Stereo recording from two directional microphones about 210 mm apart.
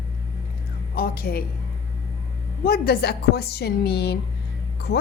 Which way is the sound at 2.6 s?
45° left (ahead or behind).